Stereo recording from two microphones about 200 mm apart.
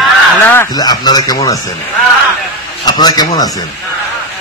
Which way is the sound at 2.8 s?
20° left (ahead or behind).